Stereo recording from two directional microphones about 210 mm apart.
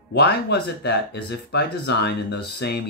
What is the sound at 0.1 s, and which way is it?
Speech, 50° left (ahead or behind).